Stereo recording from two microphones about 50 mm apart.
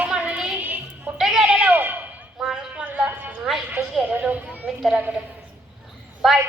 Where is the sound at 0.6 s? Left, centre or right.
Right.